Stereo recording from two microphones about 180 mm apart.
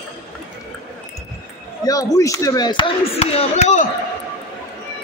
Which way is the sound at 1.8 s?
20° left (ahead or behind).